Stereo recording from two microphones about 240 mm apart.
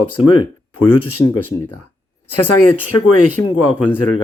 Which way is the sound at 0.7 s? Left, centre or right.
Left.